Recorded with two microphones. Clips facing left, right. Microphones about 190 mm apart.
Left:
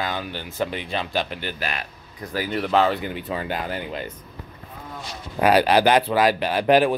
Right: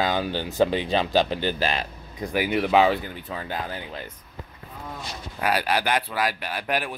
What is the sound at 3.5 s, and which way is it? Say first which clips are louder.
Speech: left 4 dB; 70° left (ahead or behind).